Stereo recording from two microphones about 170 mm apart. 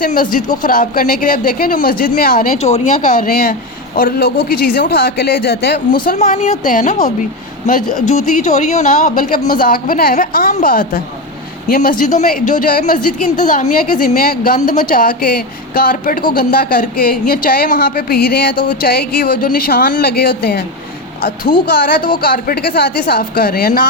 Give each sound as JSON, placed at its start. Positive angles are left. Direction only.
{"t": 0.0, "sound": "a woman's voice", "side_deg": 55}
{"t": 6.1, "sound": "a woman's voice", "side_deg": 45}
{"t": 8.3, "sound": "a woman's voice", "side_deg": 45}